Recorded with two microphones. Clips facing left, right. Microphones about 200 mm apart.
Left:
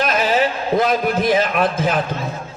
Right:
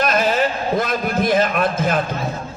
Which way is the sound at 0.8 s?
50° right (ahead or behind).